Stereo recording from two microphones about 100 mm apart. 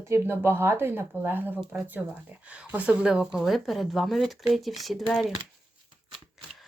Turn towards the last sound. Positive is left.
turn(degrees=0)  # may be behind; listen again after turning